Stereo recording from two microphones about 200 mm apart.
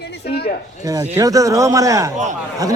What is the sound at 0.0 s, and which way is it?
Speech, 55° left (ahead or behind).